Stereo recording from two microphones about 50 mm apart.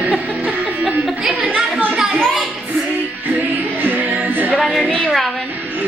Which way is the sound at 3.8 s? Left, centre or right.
Right.